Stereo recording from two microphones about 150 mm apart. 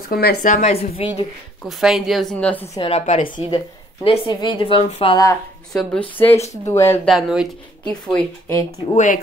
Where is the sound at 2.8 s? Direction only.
40° left (ahead or behind).